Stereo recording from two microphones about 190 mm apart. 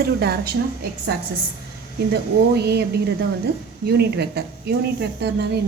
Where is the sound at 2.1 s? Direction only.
60° right (ahead or behind).